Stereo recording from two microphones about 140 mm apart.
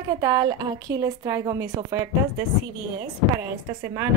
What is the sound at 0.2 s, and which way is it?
A woman's voice, 25° right (ahead or behind).